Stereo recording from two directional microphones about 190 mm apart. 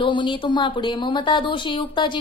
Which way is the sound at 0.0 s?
25° left (ahead or behind).